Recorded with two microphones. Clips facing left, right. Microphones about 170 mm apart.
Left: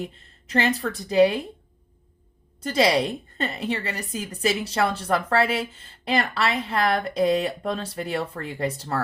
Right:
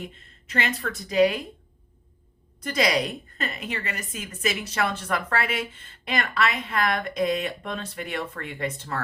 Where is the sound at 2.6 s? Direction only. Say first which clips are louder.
Left 3 dB; 30° left (ahead or behind).